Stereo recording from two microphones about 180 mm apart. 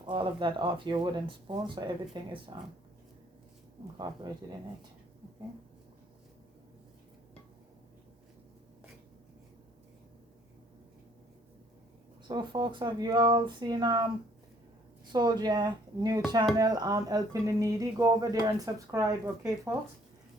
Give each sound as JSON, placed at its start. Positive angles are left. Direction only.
{"t": 0.0, "sound": "speech", "side_deg": -25}
{"t": 3.9, "sound": "speech", "side_deg": -25}
{"t": 12.3, "sound": "speech", "side_deg": -25}
{"t": 15.1, "sound": "speech", "side_deg": -20}